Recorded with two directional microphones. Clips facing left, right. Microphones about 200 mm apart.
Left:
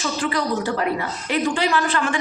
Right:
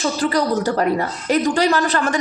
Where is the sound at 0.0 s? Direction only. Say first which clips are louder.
Right 4 dB; 40° right (ahead or behind).